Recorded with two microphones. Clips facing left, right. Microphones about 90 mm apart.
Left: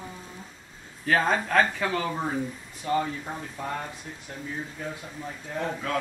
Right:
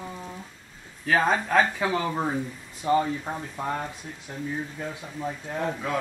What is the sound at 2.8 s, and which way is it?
Speech, 20° right (ahead or behind).